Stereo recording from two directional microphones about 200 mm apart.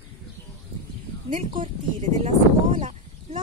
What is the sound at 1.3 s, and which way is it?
Speech, 30° right (ahead or behind).